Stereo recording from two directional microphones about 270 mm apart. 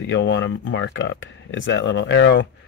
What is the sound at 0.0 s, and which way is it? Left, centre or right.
Speech, left.